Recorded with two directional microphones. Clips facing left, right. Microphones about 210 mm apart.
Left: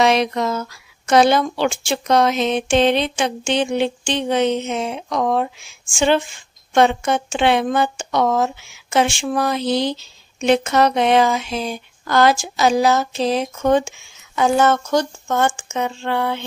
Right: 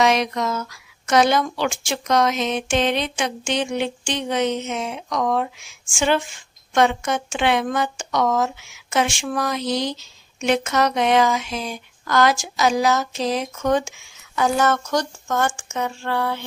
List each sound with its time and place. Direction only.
0.0 s speech: 30° left (ahead or behind)